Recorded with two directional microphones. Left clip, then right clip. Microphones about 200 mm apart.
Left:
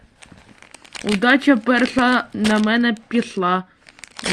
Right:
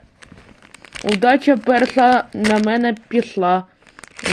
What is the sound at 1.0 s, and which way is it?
Speech, 25° left (ahead or behind).